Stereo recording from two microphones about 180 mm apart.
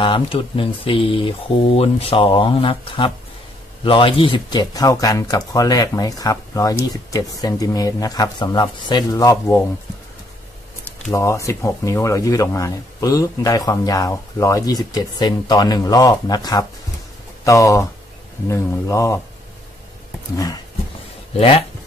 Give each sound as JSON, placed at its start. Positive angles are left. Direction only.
{"t": 0.0, "sound": "speech", "side_deg": 30}
{"t": 11.1, "sound": "speech", "side_deg": 15}
{"t": 20.3, "sound": "speech", "side_deg": 20}
{"t": 21.3, "sound": "speech", "side_deg": 30}